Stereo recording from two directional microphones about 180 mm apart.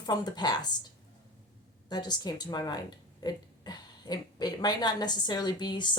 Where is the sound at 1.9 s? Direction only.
20° left (ahead or behind).